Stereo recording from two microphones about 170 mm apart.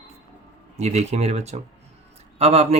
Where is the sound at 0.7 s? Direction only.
40° right (ahead or behind).